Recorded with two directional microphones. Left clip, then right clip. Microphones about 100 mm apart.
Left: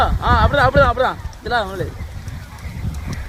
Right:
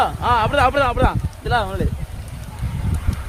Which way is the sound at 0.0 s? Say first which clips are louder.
Left 1 dB; 15° left (ahead or behind).